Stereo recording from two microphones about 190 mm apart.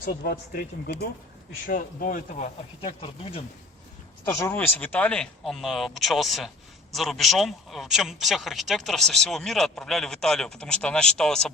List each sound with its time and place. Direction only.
0.0 s speech: 55° left (ahead or behind)
1.6 s speech: 50° left (ahead or behind)
2.8 s speech: 30° left (ahead or behind)
4.3 s speech: 15° left (ahead or behind)